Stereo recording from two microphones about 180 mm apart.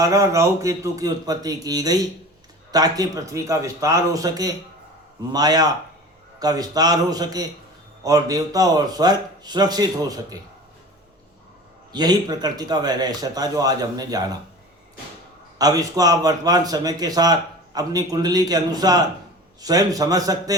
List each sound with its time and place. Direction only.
0.0 s speech: 15° right (ahead or behind)
11.9 s speech: 20° right (ahead or behind)
15.5 s speech: 20° right (ahead or behind)